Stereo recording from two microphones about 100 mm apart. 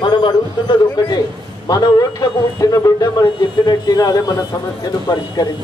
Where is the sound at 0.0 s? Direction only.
50° left (ahead or behind).